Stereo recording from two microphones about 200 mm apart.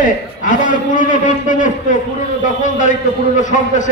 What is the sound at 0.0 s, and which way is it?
A man's voice, 40° left (ahead or behind).